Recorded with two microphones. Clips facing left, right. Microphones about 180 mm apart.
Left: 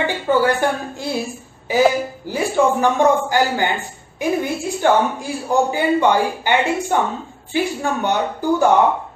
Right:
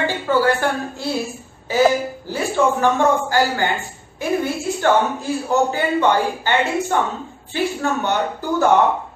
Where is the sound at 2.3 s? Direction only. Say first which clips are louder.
Left 2 dB; 15° left (ahead or behind).